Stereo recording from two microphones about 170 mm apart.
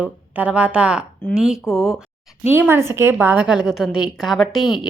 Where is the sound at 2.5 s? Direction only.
15° right (ahead or behind).